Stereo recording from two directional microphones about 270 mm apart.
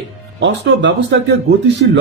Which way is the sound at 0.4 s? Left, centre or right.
Right.